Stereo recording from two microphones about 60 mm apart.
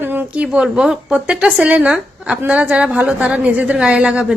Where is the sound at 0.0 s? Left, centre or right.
Right.